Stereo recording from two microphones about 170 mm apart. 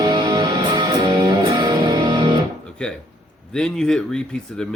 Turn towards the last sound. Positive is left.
turn(degrees=5)  # may be behind; listen again after turning